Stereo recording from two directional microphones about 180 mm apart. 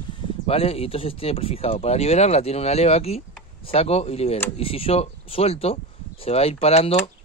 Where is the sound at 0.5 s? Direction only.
30° left (ahead or behind).